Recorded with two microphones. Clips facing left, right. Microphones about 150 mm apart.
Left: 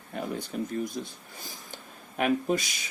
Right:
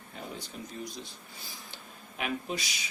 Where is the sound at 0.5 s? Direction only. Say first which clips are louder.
Left 9 dB; 60° left (ahead or behind).